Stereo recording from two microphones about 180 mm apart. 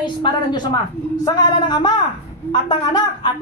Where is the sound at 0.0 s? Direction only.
25° left (ahead or behind).